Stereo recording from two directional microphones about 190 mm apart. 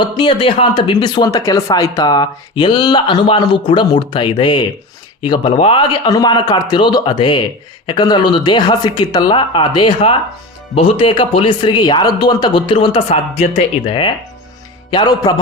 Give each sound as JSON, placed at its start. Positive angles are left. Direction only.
{"t": 0.0, "sound": "speech", "side_deg": 25}